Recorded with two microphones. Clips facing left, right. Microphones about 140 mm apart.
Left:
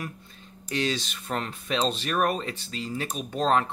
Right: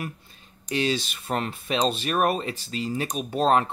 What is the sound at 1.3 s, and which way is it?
Speech, 20° right (ahead or behind).